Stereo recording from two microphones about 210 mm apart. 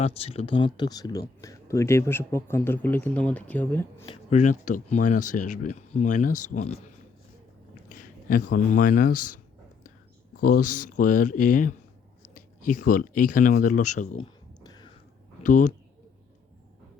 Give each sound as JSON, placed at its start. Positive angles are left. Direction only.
{"t": 0.0, "sound": "speech", "side_deg": 25}
{"t": 4.0, "sound": "speech", "side_deg": 30}
{"t": 7.9, "sound": "a sound", "side_deg": 40}
{"t": 8.5, "sound": "speech", "side_deg": 40}
{"t": 10.4, "sound": "speech", "side_deg": 40}
{"t": 14.2, "sound": "a sound", "side_deg": 20}
{"t": 15.4, "sound": "speech", "side_deg": 40}